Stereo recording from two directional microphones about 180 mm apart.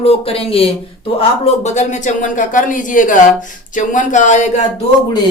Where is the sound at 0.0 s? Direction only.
35° left (ahead or behind).